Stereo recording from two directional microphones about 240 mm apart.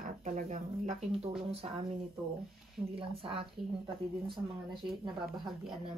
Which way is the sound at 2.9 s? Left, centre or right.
Right.